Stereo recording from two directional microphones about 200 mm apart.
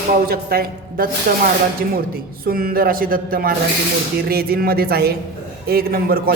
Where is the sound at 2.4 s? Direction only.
45° right (ahead or behind).